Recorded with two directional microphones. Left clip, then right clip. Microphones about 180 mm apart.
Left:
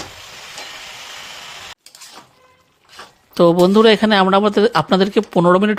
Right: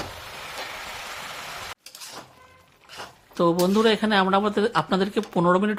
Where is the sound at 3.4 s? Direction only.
45° left (ahead or behind).